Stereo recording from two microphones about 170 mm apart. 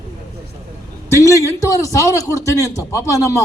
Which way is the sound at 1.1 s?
15° left (ahead or behind).